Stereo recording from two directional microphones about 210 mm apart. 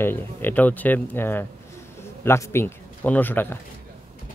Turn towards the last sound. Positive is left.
turn(degrees=10)  # may be behind; listen again after turning